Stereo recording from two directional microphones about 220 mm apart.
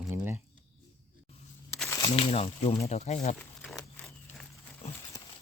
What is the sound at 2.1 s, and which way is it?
Speech, 25° left (ahead or behind).